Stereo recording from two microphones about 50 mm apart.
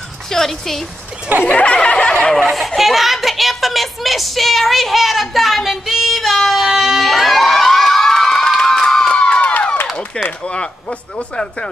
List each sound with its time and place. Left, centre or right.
0.3 s speech: centre
1.4 s speech: left
2.5 s a child's voice: centre
9.1 s crowd: left
9.5 s clapping: left
10.4 s speech: centre